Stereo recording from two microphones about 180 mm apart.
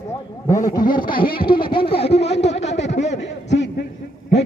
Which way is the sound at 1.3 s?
55° left (ahead or behind).